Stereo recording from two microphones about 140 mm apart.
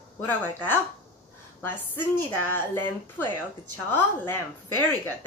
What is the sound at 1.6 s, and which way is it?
A woman's voice, 15° left (ahead or behind).